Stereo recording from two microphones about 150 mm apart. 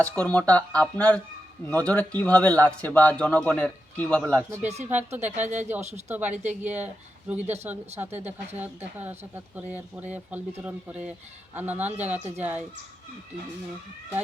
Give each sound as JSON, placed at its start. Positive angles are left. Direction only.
{"t": 0.0, "sound": "speech", "side_deg": 10}
{"t": 4.6, "sound": "speech", "side_deg": -45}
{"t": 7.9, "sound": "speech", "side_deg": -15}